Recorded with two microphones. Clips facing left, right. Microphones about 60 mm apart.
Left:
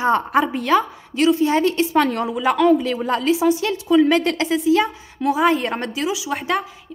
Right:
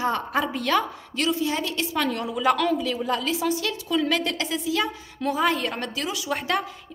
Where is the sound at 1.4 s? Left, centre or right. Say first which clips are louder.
Left 9 dB; left.